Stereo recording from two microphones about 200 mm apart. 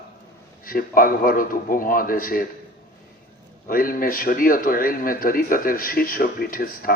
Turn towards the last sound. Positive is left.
turn(degrees=45)  # may be behind; listen again after turning